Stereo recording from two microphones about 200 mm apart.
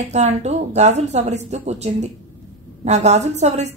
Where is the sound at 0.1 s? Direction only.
35° right (ahead or behind).